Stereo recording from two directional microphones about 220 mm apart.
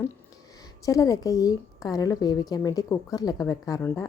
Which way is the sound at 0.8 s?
15° left (ahead or behind).